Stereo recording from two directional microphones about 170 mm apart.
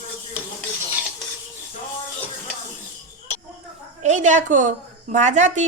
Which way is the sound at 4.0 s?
45° right (ahead or behind).